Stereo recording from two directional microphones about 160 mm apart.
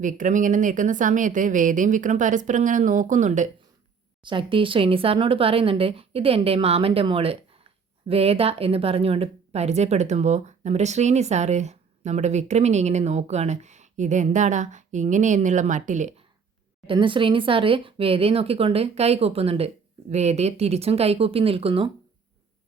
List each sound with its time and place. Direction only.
0.0 s speech: 55° right (ahead or behind)
4.2 s speech: 30° right (ahead or behind); by 16.2 s 50° right (ahead or behind)
16.8 s speech: 30° right (ahead or behind)